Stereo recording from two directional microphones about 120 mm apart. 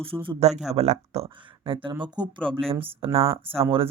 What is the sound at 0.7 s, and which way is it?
Speech, 65° right (ahead or behind).